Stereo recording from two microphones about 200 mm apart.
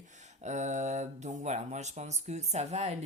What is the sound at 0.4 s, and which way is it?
Speech, 35° right (ahead or behind).